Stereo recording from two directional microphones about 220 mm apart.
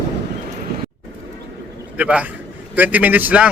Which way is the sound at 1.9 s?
5° right (ahead or behind).